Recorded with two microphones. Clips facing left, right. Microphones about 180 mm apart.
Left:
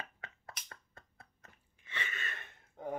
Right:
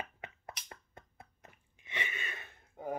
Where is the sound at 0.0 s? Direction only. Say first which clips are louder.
Right 4 dB; 20° right (ahead or behind).